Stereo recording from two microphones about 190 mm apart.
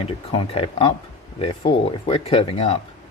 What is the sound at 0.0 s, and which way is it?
Speech, 30° left (ahead or behind).